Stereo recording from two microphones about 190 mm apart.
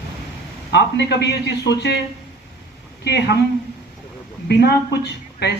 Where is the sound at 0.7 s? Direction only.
60° left (ahead or behind).